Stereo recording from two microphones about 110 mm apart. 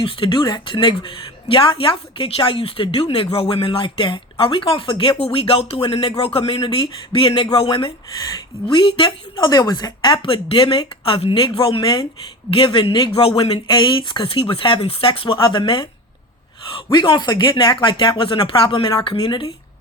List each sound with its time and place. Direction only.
0.0 s speech: 50° left (ahead or behind)